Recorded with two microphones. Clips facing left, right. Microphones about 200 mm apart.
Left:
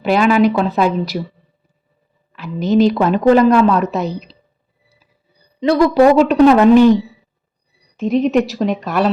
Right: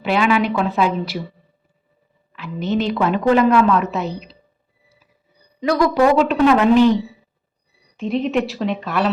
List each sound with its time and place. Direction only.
0.0 s a woman's voice: 40° left (ahead or behind)
2.3 s a woman's voice: 40° left (ahead or behind)
5.5 s a woman's voice: 30° left (ahead or behind)
7.9 s a woman's voice: 45° left (ahead or behind)